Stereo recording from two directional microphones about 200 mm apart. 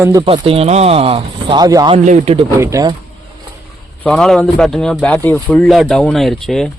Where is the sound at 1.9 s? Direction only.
35° right (ahead or behind).